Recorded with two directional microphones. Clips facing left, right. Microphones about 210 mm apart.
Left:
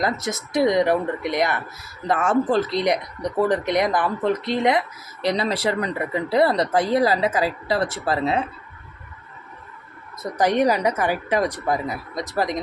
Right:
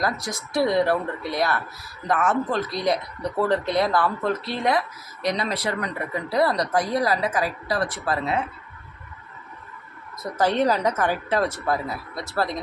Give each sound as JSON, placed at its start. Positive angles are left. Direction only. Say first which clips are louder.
{"t": 0.0, "sound": "speech", "louder": "left 3 dB", "side_deg": 20}
{"t": 10.3, "sound": "a woman's voice", "louder": "left 2 dB", "side_deg": 15}